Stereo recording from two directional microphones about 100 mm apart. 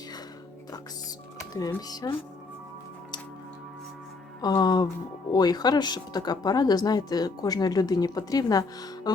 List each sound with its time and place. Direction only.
2.0 s speech: 40° left (ahead or behind)
4.4 s speech: 45° left (ahead or behind)